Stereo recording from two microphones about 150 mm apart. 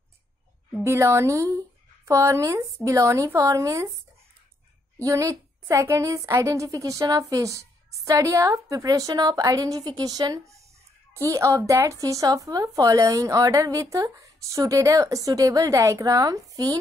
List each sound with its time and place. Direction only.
0.8 s speech: 20° right (ahead or behind)
5.0 s speech: 20° right (ahead or behind)